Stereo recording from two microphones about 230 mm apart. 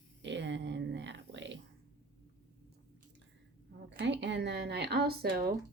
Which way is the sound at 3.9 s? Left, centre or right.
Right.